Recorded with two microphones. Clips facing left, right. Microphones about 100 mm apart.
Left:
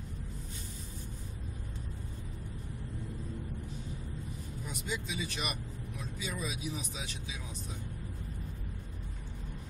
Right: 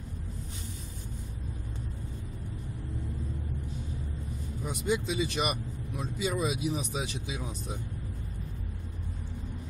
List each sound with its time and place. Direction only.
4.6 s speech: 70° right (ahead or behind)